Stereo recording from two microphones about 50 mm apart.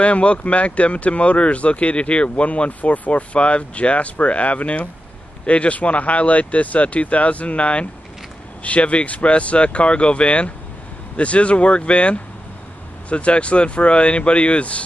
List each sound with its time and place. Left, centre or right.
0.0 s speech: left